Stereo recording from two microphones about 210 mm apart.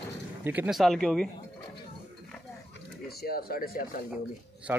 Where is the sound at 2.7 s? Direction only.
45° left (ahead or behind).